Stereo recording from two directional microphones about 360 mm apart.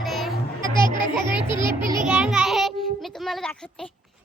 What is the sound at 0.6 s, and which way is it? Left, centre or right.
Music, centre.